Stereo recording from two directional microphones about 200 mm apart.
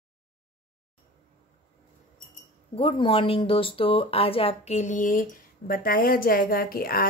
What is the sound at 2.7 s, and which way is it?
Speech, 25° left (ahead or behind).